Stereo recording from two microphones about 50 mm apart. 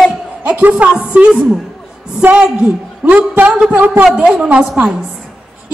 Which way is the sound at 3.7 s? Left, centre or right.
Right.